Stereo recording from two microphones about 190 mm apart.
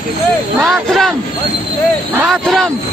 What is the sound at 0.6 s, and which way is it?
Speech, centre (ahead or behind).